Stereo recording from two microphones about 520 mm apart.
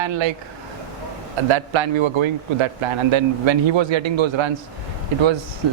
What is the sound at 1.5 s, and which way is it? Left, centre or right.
A man's voice, right.